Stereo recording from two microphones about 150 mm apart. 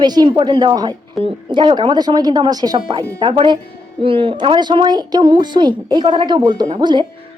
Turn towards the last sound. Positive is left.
turn(degrees=-30)  # may be behind; listen again after turning